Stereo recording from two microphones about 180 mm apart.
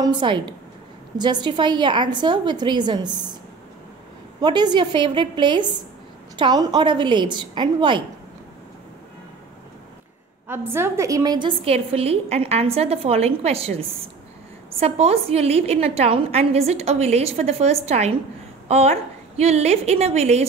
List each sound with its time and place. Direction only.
0.0 s a woman's voice: 25° right (ahead or behind)
4.4 s a woman's voice: 25° right (ahead or behind)
10.5 s a woman's voice: 10° right (ahead or behind); by 20.4 s 35° right (ahead or behind)